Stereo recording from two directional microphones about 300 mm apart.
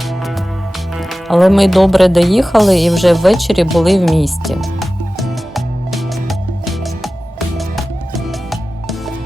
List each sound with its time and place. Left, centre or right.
0.9 s music: centre